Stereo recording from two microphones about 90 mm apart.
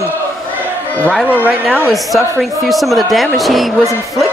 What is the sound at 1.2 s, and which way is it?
Speech, 20° right (ahead or behind).